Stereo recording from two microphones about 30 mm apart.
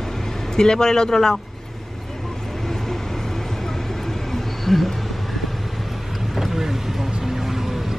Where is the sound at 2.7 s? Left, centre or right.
Centre.